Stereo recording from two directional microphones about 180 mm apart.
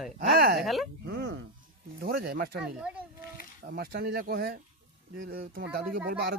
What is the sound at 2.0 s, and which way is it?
Speech, 60° right (ahead or behind).